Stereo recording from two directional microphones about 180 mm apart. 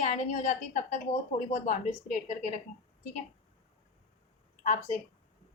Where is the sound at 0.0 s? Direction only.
40° left (ahead or behind).